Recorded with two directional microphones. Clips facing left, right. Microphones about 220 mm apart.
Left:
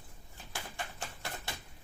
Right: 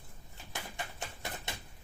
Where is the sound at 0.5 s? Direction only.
20° right (ahead or behind).